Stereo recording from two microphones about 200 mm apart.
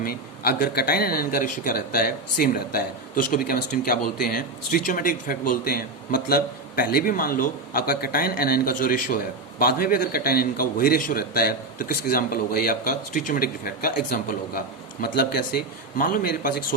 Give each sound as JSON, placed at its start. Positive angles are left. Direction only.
{"t": 0.0, "sound": "speech", "side_deg": 50}